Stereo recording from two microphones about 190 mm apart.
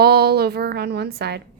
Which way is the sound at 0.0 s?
55° right (ahead or behind).